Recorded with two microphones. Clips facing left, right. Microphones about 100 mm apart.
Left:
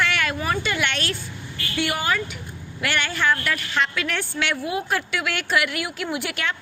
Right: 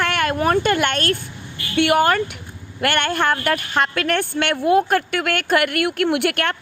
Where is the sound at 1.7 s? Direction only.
60° right (ahead or behind).